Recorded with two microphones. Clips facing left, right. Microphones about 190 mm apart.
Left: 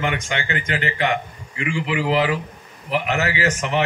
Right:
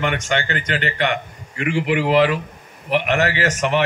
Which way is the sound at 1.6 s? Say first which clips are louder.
Right 4 dB; 60° right (ahead or behind).